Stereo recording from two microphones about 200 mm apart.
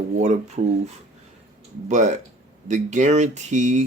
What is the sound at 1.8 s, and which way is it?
Speech, 35° right (ahead or behind).